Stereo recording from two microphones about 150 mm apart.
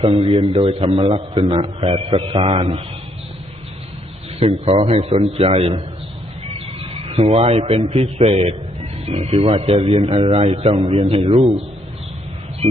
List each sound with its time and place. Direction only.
0.3 s a man's voice: 40° right (ahead or behind)
4.4 s a man's voice: 45° right (ahead or behind)